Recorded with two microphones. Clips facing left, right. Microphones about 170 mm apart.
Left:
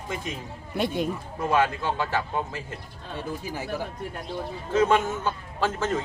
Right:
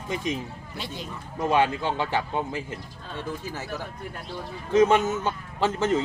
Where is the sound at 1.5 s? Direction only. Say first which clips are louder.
Right 1 dB; 20° right (ahead or behind).